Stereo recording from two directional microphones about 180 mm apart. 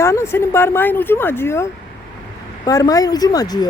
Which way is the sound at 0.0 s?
15° left (ahead or behind).